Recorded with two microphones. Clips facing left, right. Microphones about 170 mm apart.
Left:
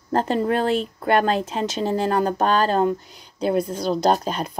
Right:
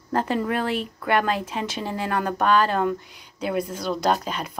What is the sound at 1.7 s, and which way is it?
Speech, 40° left (ahead or behind).